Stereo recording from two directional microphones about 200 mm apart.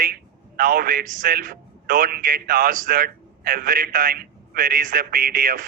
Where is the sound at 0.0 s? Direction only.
45° right (ahead or behind).